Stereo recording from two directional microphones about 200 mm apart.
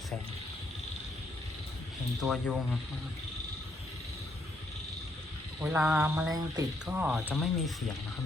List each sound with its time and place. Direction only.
2.2 s speech: centre (ahead or behind)
5.5 s a sound: 5° right (ahead or behind)
6.8 s speech: 5° right (ahead or behind)